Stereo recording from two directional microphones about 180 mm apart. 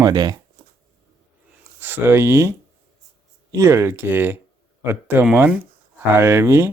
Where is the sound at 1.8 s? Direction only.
10° right (ahead or behind).